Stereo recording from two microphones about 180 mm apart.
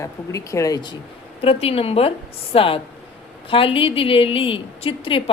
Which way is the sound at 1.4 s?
35° left (ahead or behind).